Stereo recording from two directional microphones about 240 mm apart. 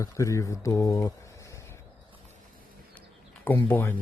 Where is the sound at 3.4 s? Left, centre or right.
Centre.